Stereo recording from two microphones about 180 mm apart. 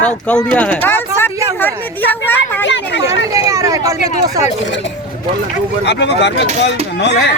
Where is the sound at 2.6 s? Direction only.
85° left.